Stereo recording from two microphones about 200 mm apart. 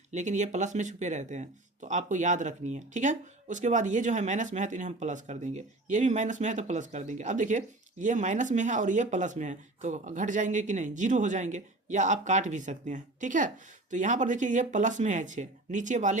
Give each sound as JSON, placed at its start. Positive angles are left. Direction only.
{"t": 0.1, "sound": "speech", "side_deg": -35}